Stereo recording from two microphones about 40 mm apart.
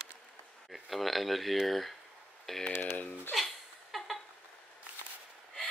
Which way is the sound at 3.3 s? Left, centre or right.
Centre.